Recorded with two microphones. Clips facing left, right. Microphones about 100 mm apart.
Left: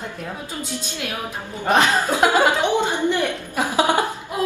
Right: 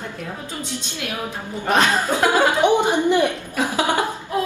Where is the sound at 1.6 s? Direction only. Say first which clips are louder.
Left 1 dB; 15° left (ahead or behind).